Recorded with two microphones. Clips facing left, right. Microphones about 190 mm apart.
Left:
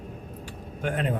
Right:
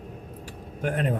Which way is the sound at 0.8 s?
40° right (ahead or behind).